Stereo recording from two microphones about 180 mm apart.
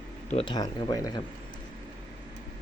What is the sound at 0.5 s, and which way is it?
Speech, 20° left (ahead or behind).